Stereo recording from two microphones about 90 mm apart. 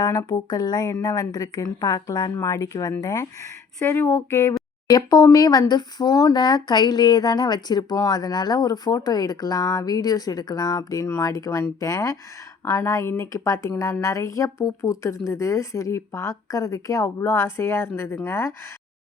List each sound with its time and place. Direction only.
0.0 s speech: 45° left (ahead or behind)
3.8 s speech: 25° left (ahead or behind)
4.9 s speech: 45° left (ahead or behind); by 18.5 s 25° left (ahead or behind)